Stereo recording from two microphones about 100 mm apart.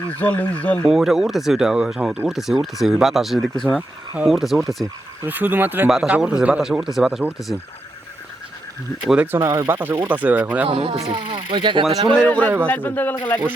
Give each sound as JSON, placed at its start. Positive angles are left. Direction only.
{"t": 0.2, "sound": "speech", "side_deg": 15}
{"t": 0.9, "sound": "speech", "side_deg": -5}
{"t": 3.8, "sound": "speech", "side_deg": -15}
{"t": 4.3, "sound": "speech", "side_deg": 0}
{"t": 5.2, "sound": "speech", "side_deg": -20}
{"t": 5.9, "sound": "speech", "side_deg": -5}
{"t": 9.2, "sound": "speech", "side_deg": -25}
{"t": 9.8, "sound": "speech", "side_deg": -20}
{"t": 10.7, "sound": "speech", "side_deg": -70}
{"t": 11.1, "sound": "speech", "side_deg": -55}
{"t": 12.2, "sound": "speech", "side_deg": 15}